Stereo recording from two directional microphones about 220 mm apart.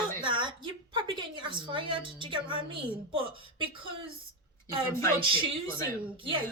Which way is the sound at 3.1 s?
25° right (ahead or behind).